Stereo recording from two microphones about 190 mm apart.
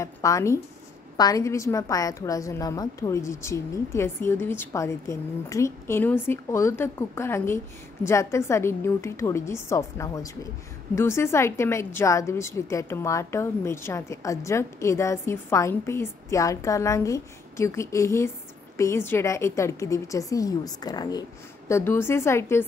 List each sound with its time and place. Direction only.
0.0 s a woman's voice: 15° left (ahead or behind)